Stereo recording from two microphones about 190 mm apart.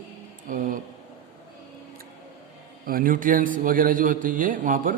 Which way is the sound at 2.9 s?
50° right (ahead or behind).